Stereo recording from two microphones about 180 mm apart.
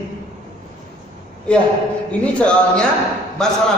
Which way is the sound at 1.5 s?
5° left (ahead or behind).